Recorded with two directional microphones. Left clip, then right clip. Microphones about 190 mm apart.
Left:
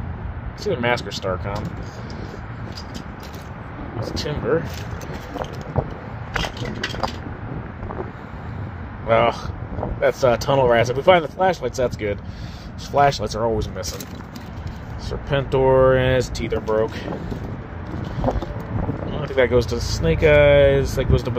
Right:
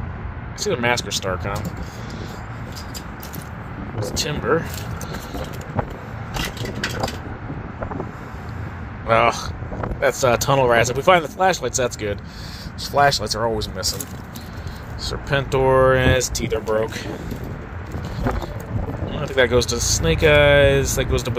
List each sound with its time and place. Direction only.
0.7 s speech: 10° left (ahead or behind)
4.2 s speech: 5° left (ahead or behind)
9.0 s speech: 10° left (ahead or behind)
15.2 s speech: 15° left (ahead or behind)
19.2 s speech: 5° left (ahead or behind)